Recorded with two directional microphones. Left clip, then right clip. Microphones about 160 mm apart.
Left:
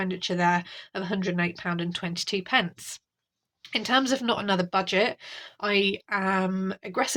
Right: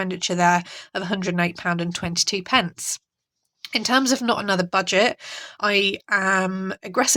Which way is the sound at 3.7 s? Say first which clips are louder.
Right 4 dB; 35° right (ahead or behind).